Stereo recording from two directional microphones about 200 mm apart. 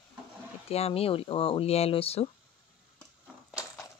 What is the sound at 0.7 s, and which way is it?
Speech, 30° left (ahead or behind).